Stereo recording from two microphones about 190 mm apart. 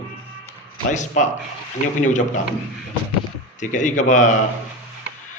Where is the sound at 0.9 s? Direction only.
40° left (ahead or behind).